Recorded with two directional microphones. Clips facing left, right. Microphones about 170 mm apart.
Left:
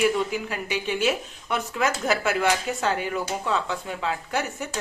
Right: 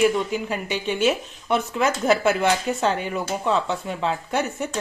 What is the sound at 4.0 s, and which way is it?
Speech, 25° right (ahead or behind).